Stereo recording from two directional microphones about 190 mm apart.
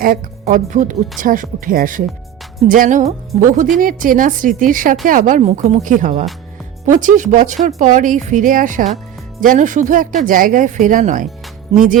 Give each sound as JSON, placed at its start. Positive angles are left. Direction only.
{"t": 0.0, "sound": "a woman's voice", "side_deg": -45}